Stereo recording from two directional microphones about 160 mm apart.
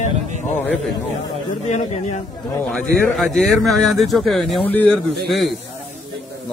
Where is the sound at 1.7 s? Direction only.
45° left (ahead or behind).